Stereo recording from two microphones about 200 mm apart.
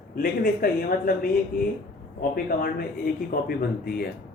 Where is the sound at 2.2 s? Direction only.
50° left (ahead or behind).